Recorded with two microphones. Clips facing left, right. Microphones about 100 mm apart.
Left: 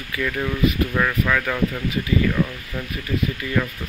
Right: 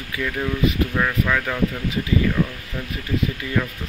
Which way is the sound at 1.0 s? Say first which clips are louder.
Left 2 dB; 10° right (ahead or behind).